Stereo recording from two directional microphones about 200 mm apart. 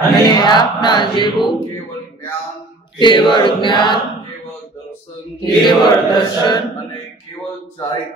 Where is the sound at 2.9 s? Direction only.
25° left (ahead or behind).